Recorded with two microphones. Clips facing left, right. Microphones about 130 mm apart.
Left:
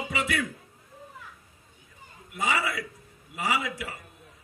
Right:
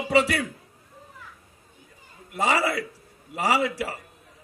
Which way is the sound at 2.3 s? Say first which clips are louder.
Right 5 dB; 35° right (ahead or behind).